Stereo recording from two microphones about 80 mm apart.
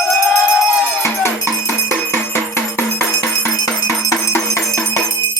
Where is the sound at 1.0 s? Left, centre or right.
Left.